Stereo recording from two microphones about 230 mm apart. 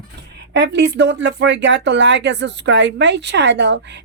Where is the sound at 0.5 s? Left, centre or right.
Right.